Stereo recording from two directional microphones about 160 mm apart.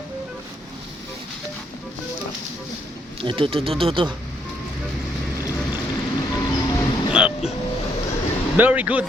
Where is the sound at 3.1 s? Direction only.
30° right (ahead or behind).